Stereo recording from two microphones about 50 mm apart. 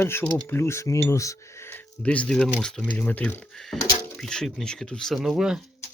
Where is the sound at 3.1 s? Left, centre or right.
Left.